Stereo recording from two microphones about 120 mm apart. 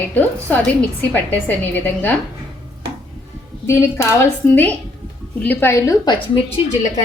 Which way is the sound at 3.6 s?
20° left (ahead or behind).